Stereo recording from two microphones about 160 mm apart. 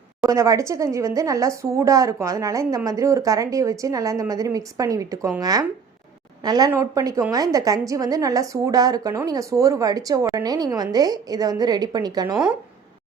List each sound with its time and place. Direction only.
0.3 s a woman's voice: 20° right (ahead or behind)